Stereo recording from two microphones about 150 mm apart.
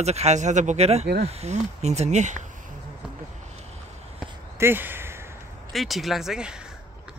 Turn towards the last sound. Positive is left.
turn(degrees=-5)  # may be behind; listen again after turning